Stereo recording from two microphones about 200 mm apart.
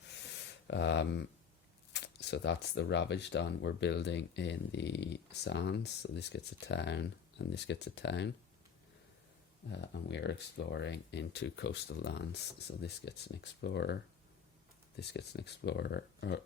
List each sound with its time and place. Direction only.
0.7 s speech: 60° left (ahead or behind)
9.6 s speech: 60° left (ahead or behind)